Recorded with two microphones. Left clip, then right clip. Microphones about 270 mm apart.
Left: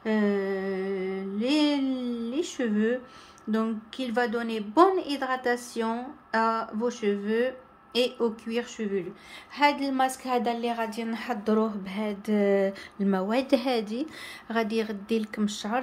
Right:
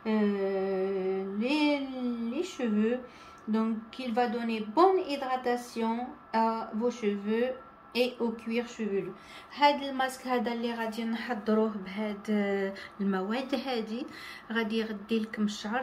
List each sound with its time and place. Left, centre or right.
0.0 s mantra: centre
1.4 s a sound: centre
3.5 s a woman's voice: centre